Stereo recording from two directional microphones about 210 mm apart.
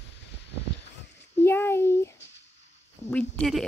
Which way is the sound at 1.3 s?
10° left (ahead or behind).